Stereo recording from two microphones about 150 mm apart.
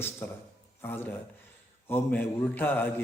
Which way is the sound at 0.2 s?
15° left (ahead or behind).